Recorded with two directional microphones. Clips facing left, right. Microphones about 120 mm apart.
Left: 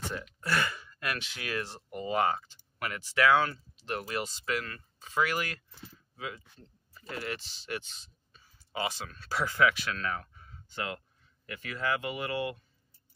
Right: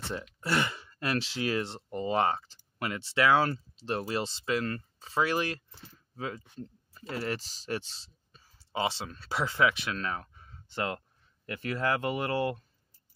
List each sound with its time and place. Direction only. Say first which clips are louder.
0.1 s speech: right 3 dB; 25° right (ahead or behind)
6.1 s speech: right 4 dB; 40° right (ahead or behind)